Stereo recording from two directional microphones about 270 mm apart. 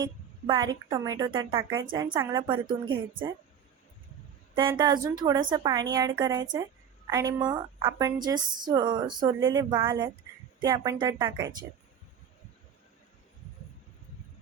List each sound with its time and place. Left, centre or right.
0.0 s speech: centre
4.5 s speech: centre